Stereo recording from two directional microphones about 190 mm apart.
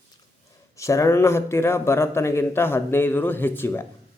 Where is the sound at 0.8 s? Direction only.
15° left (ahead or behind).